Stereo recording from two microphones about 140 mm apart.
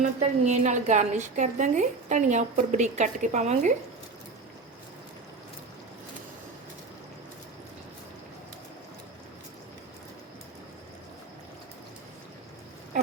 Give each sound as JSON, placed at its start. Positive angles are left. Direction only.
{"t": 0.0, "sound": "a woman's voice", "side_deg": -55}